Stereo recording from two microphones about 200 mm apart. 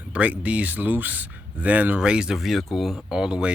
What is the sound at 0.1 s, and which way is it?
Speech, 5° right (ahead or behind).